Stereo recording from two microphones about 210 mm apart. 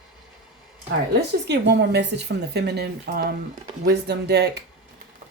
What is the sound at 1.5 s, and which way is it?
Speech, 50° right (ahead or behind).